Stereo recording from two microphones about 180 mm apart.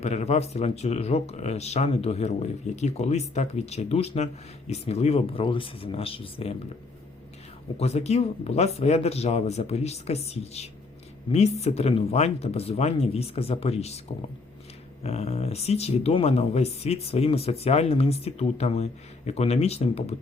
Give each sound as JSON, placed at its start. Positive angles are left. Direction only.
{"t": 0.0, "sound": "speech", "side_deg": 35}
{"t": 7.8, "sound": "speech", "side_deg": 35}
{"t": 15.0, "sound": "speech", "side_deg": 35}